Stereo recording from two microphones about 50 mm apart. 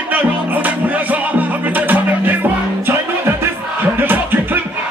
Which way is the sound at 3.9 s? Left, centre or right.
Right.